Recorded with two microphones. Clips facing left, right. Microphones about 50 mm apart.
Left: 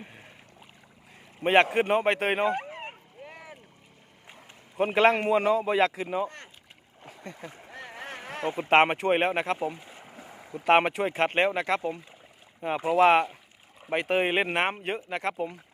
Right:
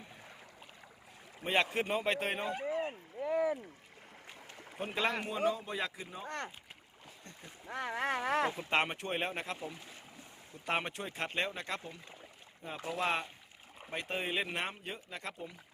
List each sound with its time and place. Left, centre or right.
0.0 s boat: left
1.5 s speech: left
4.9 s speech: left
5.3 s speech: left
6.2 s rowboat: right
7.7 s boat: right
8.4 s speech: left
10.3 s speech: left
11.1 s speech: left
13.0 s speech: left
13.9 s speech: left